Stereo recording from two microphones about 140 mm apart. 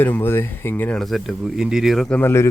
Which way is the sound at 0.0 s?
15° left (ahead or behind).